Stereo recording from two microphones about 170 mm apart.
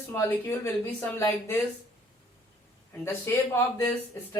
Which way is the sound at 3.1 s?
15° left (ahead or behind).